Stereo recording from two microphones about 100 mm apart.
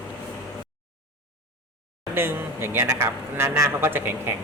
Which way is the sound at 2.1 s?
20° right (ahead or behind).